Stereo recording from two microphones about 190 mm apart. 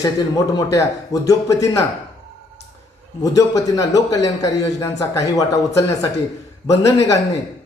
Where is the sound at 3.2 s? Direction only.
20° left (ahead or behind).